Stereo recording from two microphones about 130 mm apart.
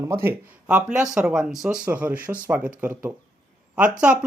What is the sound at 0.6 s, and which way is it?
Speech, 10° right (ahead or behind).